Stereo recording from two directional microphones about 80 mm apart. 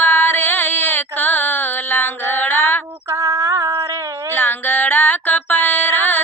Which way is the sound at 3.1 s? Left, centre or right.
Right.